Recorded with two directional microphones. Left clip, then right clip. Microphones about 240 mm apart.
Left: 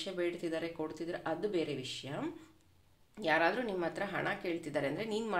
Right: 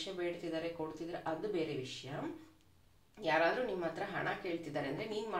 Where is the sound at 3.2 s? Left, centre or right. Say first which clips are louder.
Left 1 dB; left.